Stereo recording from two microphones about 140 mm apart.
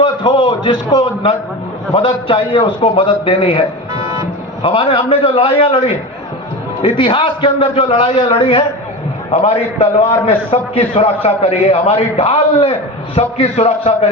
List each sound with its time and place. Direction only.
0.0 s a man's voice: 35° left (ahead or behind)
9.7 s a man's voice: 45° left (ahead or behind)